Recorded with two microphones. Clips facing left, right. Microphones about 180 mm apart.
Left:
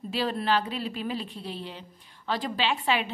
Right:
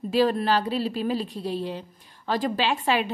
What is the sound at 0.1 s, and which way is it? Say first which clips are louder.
A woman's voice: right 5 dB; 45° right (ahead or behind).